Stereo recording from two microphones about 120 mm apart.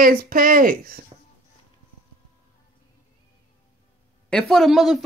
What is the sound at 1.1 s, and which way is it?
Music, 50° right (ahead or behind).